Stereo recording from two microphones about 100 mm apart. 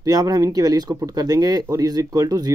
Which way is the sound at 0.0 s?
40° right (ahead or behind).